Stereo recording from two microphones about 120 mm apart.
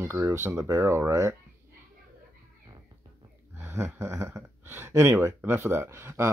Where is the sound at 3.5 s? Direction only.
20° right (ahead or behind).